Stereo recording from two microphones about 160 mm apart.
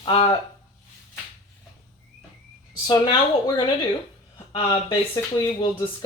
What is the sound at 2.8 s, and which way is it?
Speech, 30° left (ahead or behind).